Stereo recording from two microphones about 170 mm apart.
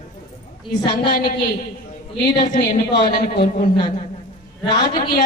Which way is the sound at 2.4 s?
45° left (ahead or behind).